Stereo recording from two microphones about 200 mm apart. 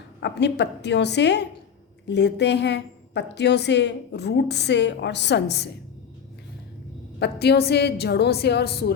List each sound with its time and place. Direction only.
0.2 s a woman's voice: 60° left (ahead or behind)
7.2 s a woman's voice: 55° left (ahead or behind)